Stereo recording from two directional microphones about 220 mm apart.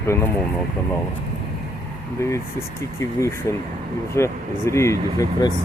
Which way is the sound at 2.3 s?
15° left (ahead or behind).